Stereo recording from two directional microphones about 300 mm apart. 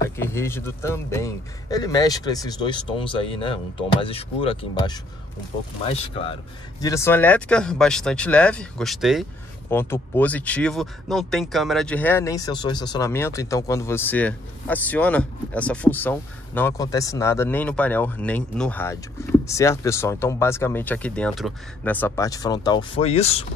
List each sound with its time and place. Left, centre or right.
0.2 s speech: centre